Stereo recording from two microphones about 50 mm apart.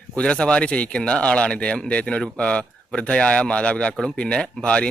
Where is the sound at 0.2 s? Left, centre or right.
Centre.